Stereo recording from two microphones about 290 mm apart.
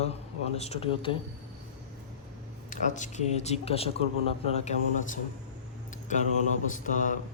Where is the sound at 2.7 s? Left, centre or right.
Left.